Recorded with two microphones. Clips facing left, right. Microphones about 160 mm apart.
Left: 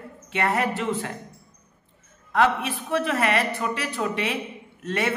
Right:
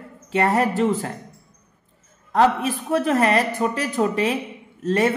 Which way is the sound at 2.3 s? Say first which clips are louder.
Right 4 dB; 40° right (ahead or behind).